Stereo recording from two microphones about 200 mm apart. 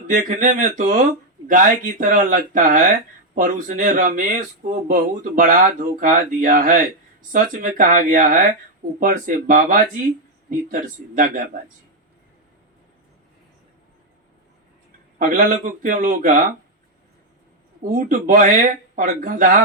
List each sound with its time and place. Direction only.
0.1 s speech: 40° right (ahead or behind)
15.2 s speech: 45° right (ahead or behind)
17.8 s speech: 40° right (ahead or behind)